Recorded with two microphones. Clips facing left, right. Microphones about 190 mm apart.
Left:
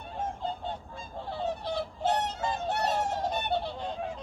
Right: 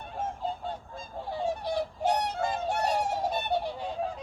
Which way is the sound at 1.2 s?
10° right (ahead or behind).